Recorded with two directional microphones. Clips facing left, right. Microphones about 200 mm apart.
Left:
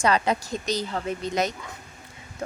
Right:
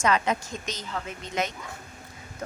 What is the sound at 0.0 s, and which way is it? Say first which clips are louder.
A woman's voice: left 2 dB; 35° left (ahead or behind).